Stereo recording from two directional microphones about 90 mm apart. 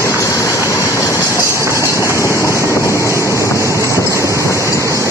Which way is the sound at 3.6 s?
35° right (ahead or behind).